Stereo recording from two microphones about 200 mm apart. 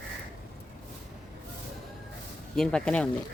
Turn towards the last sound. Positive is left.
turn(degrees=5)  # may be behind; listen again after turning